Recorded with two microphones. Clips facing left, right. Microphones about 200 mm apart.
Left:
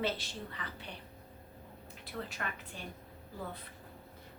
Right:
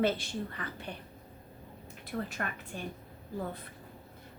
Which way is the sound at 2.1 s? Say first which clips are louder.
Right 5 dB; 45° right (ahead or behind).